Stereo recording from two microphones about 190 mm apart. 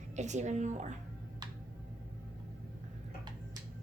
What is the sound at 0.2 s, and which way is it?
Speech, 40° right (ahead or behind).